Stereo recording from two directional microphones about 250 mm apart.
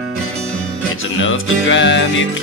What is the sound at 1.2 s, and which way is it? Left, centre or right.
Music, left.